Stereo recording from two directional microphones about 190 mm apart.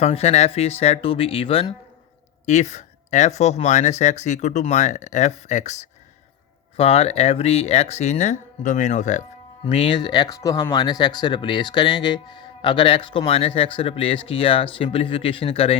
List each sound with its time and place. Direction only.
0.0 s speech: 35° left (ahead or behind)